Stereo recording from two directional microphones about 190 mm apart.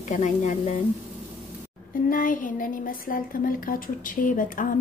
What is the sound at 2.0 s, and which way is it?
A woman's voice, 45° left (ahead or behind).